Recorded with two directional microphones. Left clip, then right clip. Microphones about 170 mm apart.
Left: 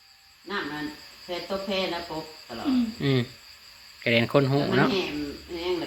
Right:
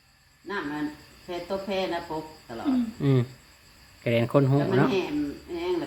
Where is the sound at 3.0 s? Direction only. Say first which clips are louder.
Even; 20° right (ahead or behind).